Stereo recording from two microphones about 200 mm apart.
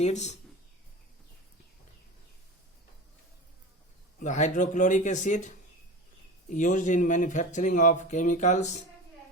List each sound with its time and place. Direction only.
0.0 s speech: 35° left (ahead or behind)
4.2 s speech: 35° left (ahead or behind)